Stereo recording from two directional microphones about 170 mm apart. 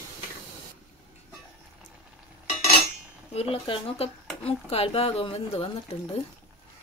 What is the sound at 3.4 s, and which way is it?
Speech, 30° left (ahead or behind).